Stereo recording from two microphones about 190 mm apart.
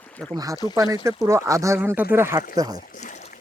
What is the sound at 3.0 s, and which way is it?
Boat, 40° left (ahead or behind).